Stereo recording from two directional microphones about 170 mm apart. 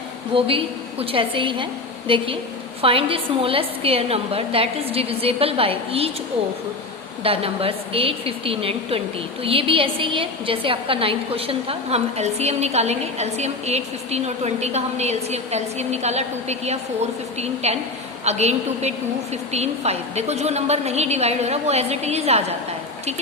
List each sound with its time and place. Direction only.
0.3 s a woman's voice: 35° right (ahead or behind)
7.3 s a woman's voice: 35° right (ahead or behind)